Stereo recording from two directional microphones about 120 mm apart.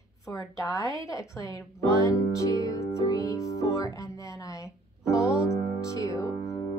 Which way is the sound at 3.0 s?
30° left (ahead or behind).